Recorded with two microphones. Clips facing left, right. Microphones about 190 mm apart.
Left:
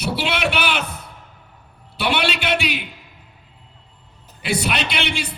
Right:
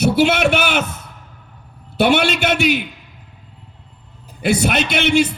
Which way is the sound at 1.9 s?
45° right (ahead or behind).